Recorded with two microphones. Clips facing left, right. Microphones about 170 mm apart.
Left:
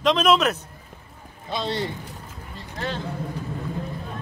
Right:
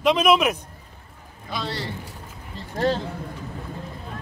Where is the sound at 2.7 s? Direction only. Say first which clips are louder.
Right 8 dB; 40° right (ahead or behind).